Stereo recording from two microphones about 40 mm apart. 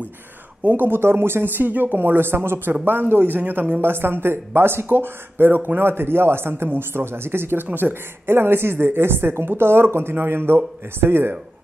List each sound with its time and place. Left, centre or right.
0.7 s speech: right
2.8 s speech: right
3.8 s speech: right
7.7 s speech: right